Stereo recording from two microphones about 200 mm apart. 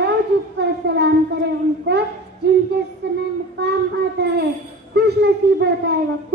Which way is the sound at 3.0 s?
60° right (ahead or behind).